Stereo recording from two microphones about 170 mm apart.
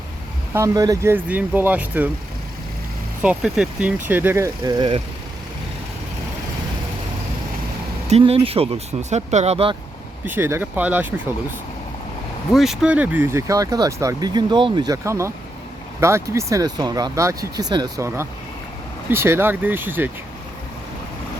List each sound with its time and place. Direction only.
0.5 s speech: 20° right (ahead or behind)
3.2 s speech: 5° right (ahead or behind); by 5.0 s 30° right (ahead or behind)
8.1 s speech: 35° right (ahead or behind)
10.2 s speech: 15° right (ahead or behind)
12.5 s speech: 5° right (ahead or behind)